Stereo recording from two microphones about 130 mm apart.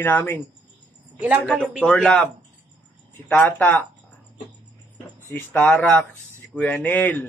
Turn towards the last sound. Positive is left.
turn(degrees=15)  # may be behind; listen again after turning